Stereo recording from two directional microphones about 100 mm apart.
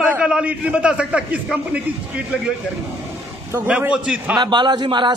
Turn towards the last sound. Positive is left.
turn(degrees=-50)  # may be behind; listen again after turning